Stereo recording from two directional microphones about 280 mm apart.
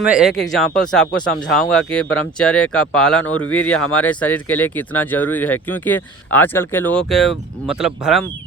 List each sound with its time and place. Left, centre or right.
0.0 s speech: centre
3.2 s speech: left
3.5 s speech: centre